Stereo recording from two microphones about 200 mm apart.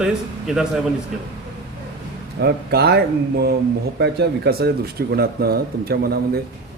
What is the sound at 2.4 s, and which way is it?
Speech, 55° right (ahead or behind).